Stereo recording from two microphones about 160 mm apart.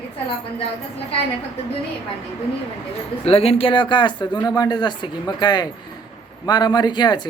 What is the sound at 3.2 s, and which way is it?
Speech, 40° left (ahead or behind).